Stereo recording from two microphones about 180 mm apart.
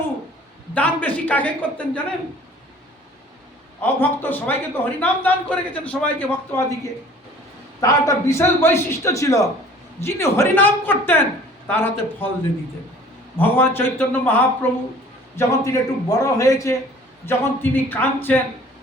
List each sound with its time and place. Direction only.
0.7 s a man's voice: 10° left (ahead or behind)
3.8 s a man's voice: 10° left (ahead or behind)
7.8 s a man's voice: 20° left (ahead or behind)
13.3 s a man's voice: 10° left (ahead or behind)